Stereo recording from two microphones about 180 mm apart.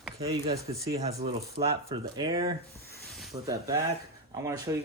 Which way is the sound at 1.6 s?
35° right (ahead or behind).